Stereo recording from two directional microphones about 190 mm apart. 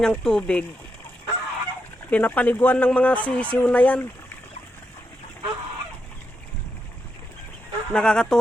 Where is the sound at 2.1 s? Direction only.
10° left (ahead or behind).